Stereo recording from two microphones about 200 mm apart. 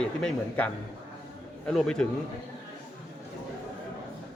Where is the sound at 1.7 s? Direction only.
5° left (ahead or behind).